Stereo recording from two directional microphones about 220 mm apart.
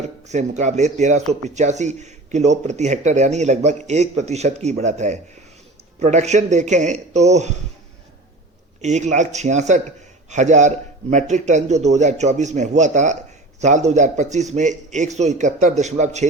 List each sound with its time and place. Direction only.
0.3 s speech: 30° right (ahead or behind)
8.8 s speech: 30° right (ahead or behind)